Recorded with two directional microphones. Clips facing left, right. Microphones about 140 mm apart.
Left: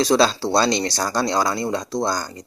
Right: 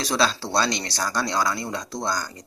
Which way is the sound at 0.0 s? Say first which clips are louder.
Left 7 dB; 30° left (ahead or behind).